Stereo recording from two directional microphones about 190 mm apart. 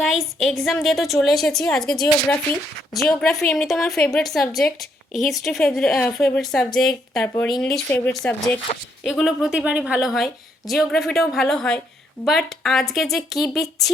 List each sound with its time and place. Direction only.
0.0 s a woman's voice: centre (ahead or behind)
8.7 s speech: 35° left (ahead or behind)
9.0 s a woman's voice: centre (ahead or behind)